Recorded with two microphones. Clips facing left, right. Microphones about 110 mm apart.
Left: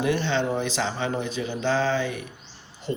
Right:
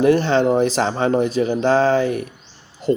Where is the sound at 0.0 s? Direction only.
40° right (ahead or behind).